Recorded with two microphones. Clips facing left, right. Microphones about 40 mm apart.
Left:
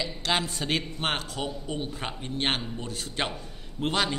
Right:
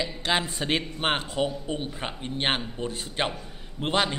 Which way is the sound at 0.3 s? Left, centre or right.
Centre.